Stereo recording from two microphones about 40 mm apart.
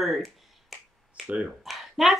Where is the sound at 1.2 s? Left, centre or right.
Right.